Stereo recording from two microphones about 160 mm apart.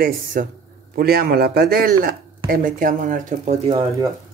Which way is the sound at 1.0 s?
70° right (ahead or behind).